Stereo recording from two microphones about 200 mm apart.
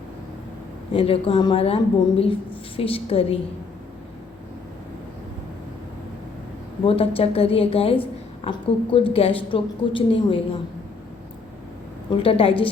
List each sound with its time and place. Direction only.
0.9 s a woman's voice: 30° left (ahead or behind)
6.8 s a woman's voice: 30° left (ahead or behind)
12.1 s a woman's voice: 25° left (ahead or behind)